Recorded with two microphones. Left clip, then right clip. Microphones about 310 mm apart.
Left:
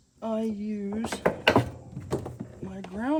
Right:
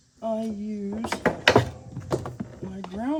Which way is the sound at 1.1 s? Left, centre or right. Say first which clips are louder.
Right 3 dB; right.